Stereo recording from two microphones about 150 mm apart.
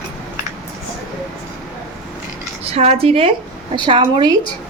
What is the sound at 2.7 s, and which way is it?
Speech, 45° right (ahead or behind).